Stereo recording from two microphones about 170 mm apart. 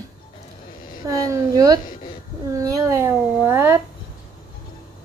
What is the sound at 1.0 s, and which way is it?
A woman's voice, 20° right (ahead or behind).